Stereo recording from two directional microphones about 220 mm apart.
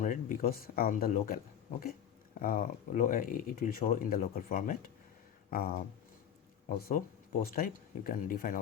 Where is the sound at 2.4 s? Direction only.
40° left (ahead or behind).